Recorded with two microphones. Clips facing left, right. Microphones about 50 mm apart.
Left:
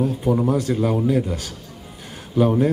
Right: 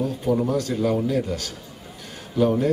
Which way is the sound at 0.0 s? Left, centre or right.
Centre.